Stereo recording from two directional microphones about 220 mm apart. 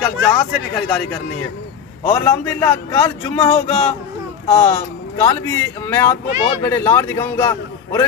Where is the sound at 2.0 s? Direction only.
10° left (ahead or behind).